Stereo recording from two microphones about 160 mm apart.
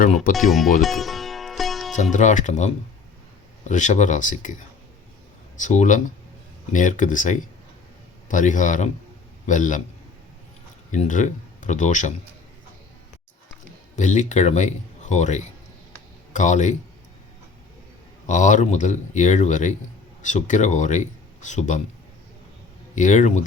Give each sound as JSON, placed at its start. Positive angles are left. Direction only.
{"t": 0.3, "sound": "speech", "side_deg": 0}
{"t": 0.8, "sound": "sitar", "side_deg": 0}
{"t": 2.1, "sound": "speech", "side_deg": 50}
{"t": 10.9, "sound": "speech", "side_deg": 50}
{"t": 13.9, "sound": "a man's voice", "side_deg": 50}
{"t": 18.3, "sound": "speech", "side_deg": 50}
{"t": 23.0, "sound": "speech", "side_deg": 50}